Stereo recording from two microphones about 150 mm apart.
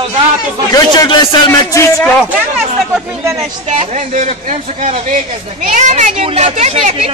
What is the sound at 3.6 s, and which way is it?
Speech, 50° right (ahead or behind).